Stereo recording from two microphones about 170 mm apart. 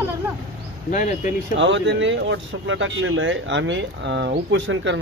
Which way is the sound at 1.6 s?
90° right.